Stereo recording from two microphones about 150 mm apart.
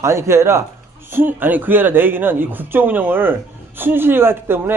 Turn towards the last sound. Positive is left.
turn(degrees=-15)  # may be behind; listen again after turning